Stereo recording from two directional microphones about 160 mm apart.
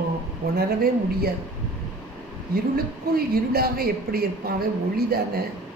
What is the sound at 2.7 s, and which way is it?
A woman's voice, 70° right (ahead or behind).